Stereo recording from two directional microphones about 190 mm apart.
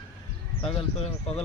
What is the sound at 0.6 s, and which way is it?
Speech, 30° left (ahead or behind).